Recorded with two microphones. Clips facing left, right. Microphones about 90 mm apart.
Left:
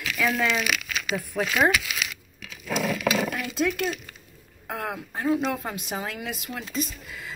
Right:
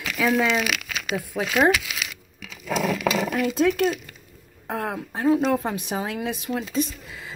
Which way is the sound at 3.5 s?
35° right (ahead or behind).